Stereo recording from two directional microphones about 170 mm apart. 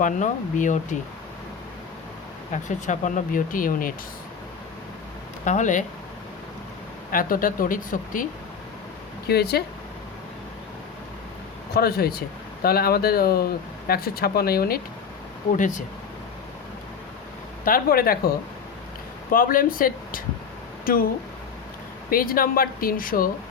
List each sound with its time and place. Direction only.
0.0 s speech: 50° left (ahead or behind)
2.5 s speech: 45° left (ahead or behind)
5.5 s speech: 45° left (ahead or behind)
7.1 s speech: 55° left (ahead or behind)
9.2 s speech: 70° left (ahead or behind)
11.7 s speech: 65° left (ahead or behind)
15.5 s speech: 50° left (ahead or behind)
17.7 s speech: 60° left (ahead or behind)
22.1 s speech: 55° left (ahead or behind)